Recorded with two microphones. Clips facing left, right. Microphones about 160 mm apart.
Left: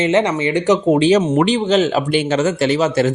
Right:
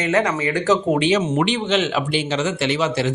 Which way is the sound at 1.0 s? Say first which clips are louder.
Left 5 dB; 40° left (ahead or behind).